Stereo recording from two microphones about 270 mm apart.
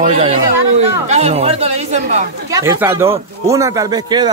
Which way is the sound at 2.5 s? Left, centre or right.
Centre.